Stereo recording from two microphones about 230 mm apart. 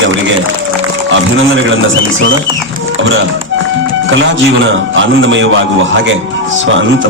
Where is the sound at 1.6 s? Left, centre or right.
Right.